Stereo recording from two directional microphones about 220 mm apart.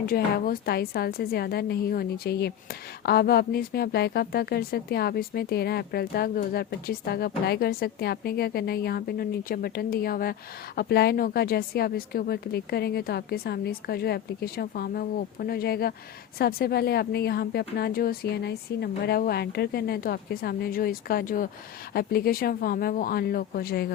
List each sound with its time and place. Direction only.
0.0 s speech: 40° left (ahead or behind)